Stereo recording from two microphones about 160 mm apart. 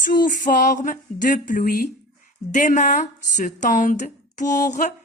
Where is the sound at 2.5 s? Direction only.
50° left (ahead or behind).